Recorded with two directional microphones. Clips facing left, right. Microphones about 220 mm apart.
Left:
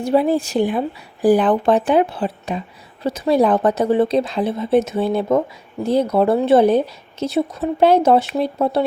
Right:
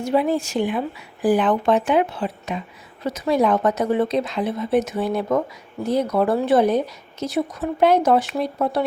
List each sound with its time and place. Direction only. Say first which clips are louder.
0.0 s speech: left 3 dB; 35° left (ahead or behind)